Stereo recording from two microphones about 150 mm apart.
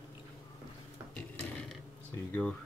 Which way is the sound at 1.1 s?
10° left (ahead or behind).